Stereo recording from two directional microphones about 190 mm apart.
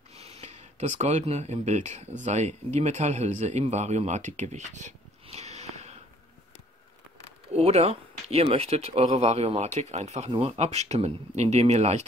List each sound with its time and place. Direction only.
0.1 s a man's voice: 35° right (ahead or behind)
7.2 s speech: 35° right (ahead or behind)